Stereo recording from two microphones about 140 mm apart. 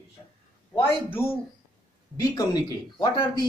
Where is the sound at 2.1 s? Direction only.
25° left (ahead or behind).